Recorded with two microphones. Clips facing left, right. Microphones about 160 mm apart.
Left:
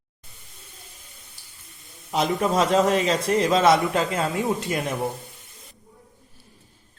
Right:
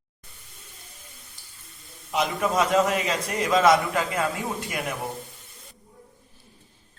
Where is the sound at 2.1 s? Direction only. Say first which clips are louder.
Left 2 dB; 30° left (ahead or behind).